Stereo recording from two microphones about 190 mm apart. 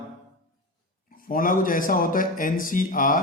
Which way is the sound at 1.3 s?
45° left (ahead or behind).